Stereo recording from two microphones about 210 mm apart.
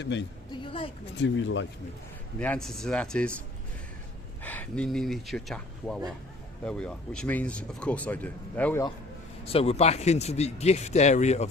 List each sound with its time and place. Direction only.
0.0 s speech: 55° left (ahead or behind)
0.5 s a sound: 25° left (ahead or behind)
1.1 s speech: 60° left (ahead or behind)
2.4 s speech: 5° left (ahead or behind)
4.4 s speech: 10° left (ahead or behind)
9.4 s speech: 30° left (ahead or behind)